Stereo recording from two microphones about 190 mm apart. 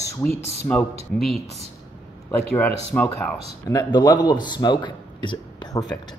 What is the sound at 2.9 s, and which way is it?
Speech, 10° left (ahead or behind).